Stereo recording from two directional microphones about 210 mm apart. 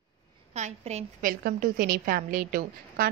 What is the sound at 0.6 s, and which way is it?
A woman's voice, 35° right (ahead or behind).